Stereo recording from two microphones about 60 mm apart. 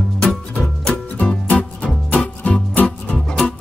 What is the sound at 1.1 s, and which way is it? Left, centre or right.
Music, left.